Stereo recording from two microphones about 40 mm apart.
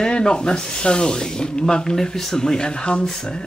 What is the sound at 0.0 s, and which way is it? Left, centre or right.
Speech, centre.